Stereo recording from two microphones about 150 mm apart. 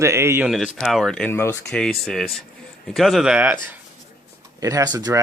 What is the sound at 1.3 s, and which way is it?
Speech, 15° left (ahead or behind).